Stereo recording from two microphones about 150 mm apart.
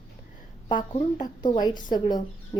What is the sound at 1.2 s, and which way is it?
Speech, 25° left (ahead or behind).